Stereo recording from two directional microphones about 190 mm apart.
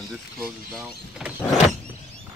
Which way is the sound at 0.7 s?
Centre (ahead or behind).